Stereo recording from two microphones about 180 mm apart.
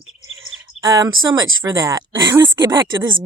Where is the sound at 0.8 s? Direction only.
5° right (ahead or behind).